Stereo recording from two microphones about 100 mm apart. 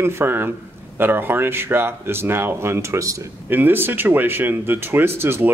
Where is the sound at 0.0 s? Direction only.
25° right (ahead or behind).